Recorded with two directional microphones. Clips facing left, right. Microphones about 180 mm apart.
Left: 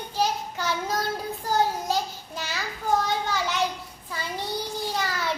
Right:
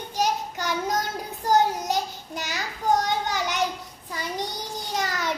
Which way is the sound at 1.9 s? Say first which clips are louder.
Even; 15° right (ahead or behind).